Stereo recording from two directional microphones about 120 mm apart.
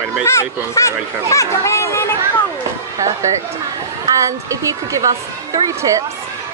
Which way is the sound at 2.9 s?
30° right (ahead or behind).